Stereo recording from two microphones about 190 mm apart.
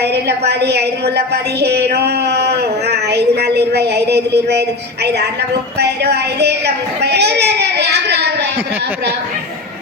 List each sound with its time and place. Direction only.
0.0 s a woman's voice: 60° right (ahead or behind)
5.8 s a woman's voice: 60° right (ahead or behind)